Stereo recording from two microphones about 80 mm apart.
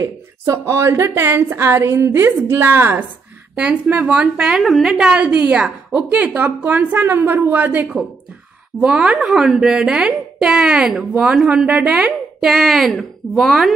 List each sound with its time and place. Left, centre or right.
0.0 s a woman's voice: right
3.5 s a woman's voice: centre
11.6 s a woman's voice: centre
12.4 s a woman's voice: centre